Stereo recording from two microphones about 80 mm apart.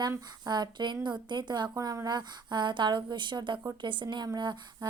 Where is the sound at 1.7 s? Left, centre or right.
Right.